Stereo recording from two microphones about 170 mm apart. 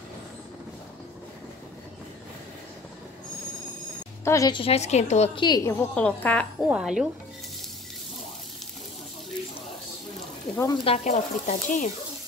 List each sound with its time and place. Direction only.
4.2 s a woman's voice: 20° left (ahead or behind); by 5.4 s 40° left (ahead or behind)
5.4 s a woman's voice: 20° left (ahead or behind)
6.7 s speech: 5° right (ahead or behind)
10.6 s speech: 30° left (ahead or behind)
11.1 s speech: 45° left (ahead or behind)